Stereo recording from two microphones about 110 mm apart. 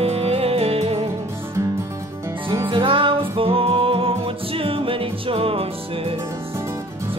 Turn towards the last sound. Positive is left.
turn(degrees=-60)  # may be behind; listen again after turning